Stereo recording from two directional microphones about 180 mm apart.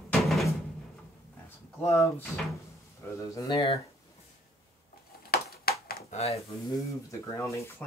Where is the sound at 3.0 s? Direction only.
15° left (ahead or behind).